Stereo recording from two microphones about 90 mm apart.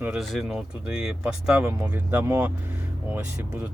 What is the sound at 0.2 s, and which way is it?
Speech, centre (ahead or behind).